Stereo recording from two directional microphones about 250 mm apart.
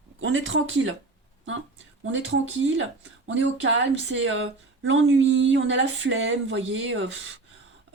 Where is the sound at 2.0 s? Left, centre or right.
Right.